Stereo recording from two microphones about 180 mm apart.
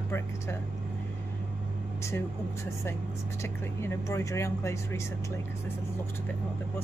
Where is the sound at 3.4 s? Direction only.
15° left (ahead or behind).